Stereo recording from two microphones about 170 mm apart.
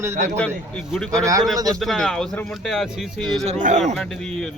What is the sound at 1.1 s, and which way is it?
Speech, 20° right (ahead or behind).